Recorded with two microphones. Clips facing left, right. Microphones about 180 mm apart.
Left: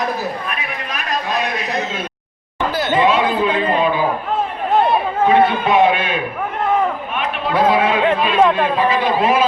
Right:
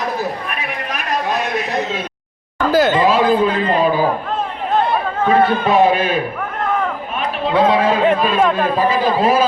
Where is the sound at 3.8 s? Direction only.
40° right (ahead or behind).